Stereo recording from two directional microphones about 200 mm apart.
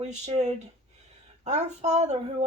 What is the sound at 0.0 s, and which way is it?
Speech, 35° right (ahead or behind).